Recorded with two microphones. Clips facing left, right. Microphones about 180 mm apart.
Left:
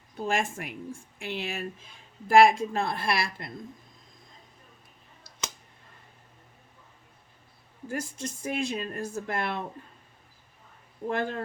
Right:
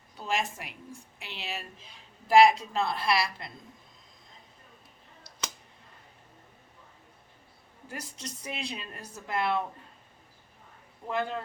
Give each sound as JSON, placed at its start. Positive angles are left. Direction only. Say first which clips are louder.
{"t": 0.2, "sound": "speech", "louder": "left 3 dB", "side_deg": 50}
{"t": 7.9, "sound": "speech", "louder": "left 7 dB", "side_deg": 50}
{"t": 11.1, "sound": "speech", "louder": "left 2 dB", "side_deg": 50}